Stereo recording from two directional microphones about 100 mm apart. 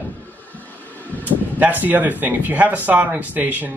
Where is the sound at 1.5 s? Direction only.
15° right (ahead or behind).